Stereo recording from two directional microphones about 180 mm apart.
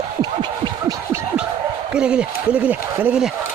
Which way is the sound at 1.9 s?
5° right (ahead or behind).